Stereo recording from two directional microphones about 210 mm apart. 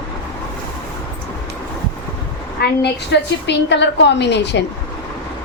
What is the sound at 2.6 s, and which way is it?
A woman's voice, 55° left (ahead or behind).